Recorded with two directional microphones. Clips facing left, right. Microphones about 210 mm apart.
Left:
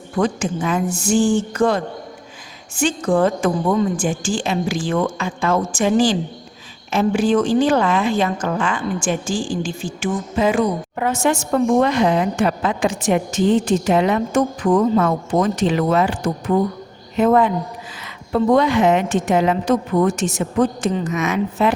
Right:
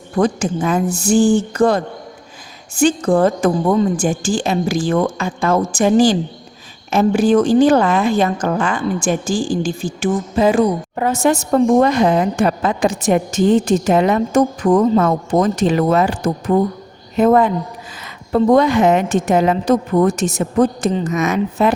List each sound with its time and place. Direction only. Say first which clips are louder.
0.2 s a woman's voice: right 3 dB; 40° right (ahead or behind)